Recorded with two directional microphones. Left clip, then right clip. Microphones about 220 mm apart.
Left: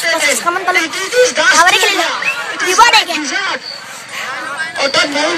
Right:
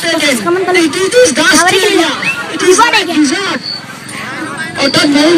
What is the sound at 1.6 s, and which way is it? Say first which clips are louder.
Speech: right 1 dB; 40° left (ahead or behind).